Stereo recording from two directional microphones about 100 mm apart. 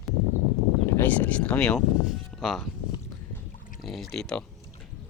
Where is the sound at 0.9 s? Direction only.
20° left (ahead or behind); by 2.7 s centre (ahead or behind).